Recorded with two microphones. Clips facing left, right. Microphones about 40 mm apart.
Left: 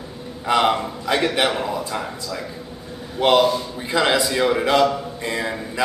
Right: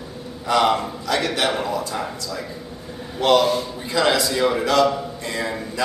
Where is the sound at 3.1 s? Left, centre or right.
Left.